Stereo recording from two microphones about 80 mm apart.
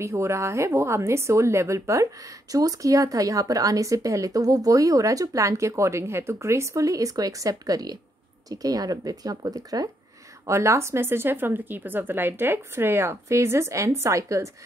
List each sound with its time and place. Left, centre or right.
0.0 s speech: right
10.4 s speech: right